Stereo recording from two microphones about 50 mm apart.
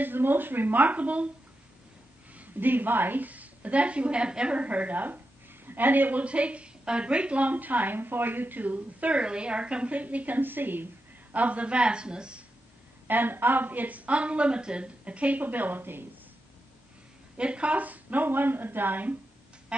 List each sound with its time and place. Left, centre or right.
0.0 s a woman's voice: right
2.3 s a woman's voice: right
6.2 s a woman's voice: right
11.3 s a woman's voice: right
13.0 s a woman's voice: right
17.4 s a woman's voice: right